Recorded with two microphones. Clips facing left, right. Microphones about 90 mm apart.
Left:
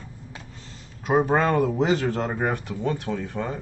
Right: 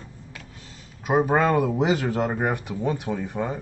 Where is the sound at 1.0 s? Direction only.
10° right (ahead or behind).